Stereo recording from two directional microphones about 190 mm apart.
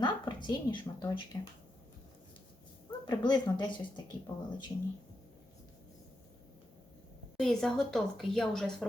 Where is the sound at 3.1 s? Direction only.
20° left (ahead or behind).